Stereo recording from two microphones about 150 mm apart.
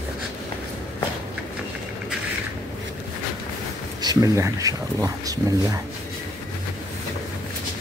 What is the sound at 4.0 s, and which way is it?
Speech, 25° right (ahead or behind).